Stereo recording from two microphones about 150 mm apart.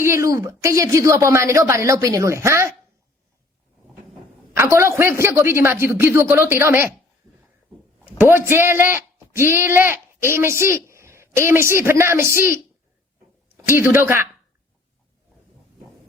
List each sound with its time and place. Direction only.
0.0 s a woman's voice: 20° right (ahead or behind)
4.5 s speech: 20° right (ahead or behind)
8.0 s a sound: 15° right (ahead or behind)
8.4 s speech: 15° right (ahead or behind)
13.7 s speech: 15° right (ahead or behind)